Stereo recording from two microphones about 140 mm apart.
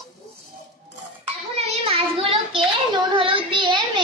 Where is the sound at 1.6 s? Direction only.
45° right (ahead or behind).